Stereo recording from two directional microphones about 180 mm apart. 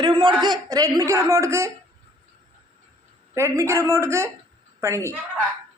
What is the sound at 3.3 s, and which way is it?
Humming, 15° right (ahead or behind).